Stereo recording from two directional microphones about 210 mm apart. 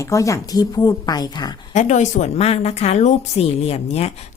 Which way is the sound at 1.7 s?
35° left (ahead or behind).